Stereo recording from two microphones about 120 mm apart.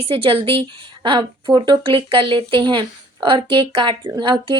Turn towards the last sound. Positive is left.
turn(degrees=-40)  # may be behind; listen again after turning